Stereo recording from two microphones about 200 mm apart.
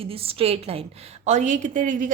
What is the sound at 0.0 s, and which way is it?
A woman's voice, 30° right (ahead or behind).